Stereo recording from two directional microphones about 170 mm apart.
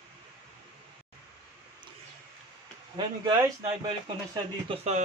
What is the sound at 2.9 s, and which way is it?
Speech, 25° right (ahead or behind).